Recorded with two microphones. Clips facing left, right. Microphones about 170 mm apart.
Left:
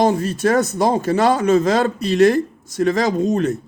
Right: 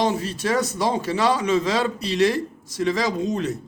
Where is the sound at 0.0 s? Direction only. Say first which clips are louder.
Left 6 dB; 50° left (ahead or behind).